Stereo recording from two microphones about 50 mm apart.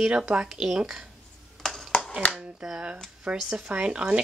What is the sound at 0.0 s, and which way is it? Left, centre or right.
Speech, centre.